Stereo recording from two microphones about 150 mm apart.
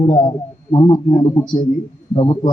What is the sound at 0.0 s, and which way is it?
A man's voice, 25° left (ahead or behind).